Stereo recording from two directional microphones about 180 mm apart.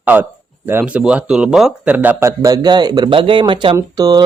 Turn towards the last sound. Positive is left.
turn(degrees=-20)  # may be behind; listen again after turning